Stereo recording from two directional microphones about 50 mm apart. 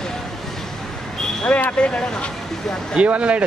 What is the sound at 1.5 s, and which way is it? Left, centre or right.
Speech, left.